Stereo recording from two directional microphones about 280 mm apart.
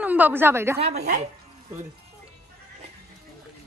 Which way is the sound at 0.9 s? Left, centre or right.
Right.